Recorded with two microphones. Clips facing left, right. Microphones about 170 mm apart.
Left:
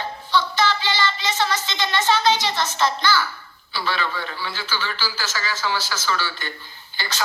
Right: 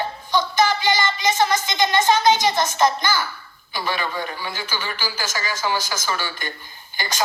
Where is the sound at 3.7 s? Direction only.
15° right (ahead or behind).